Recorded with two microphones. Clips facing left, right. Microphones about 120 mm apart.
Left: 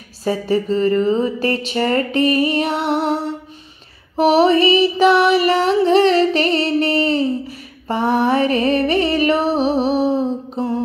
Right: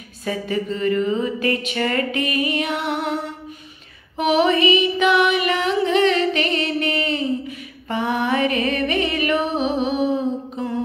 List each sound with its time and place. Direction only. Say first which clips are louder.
0.2 s speech: left 5 dB; 30° left (ahead or behind)
4.2 s music: left 4 dB; 35° left (ahead or behind)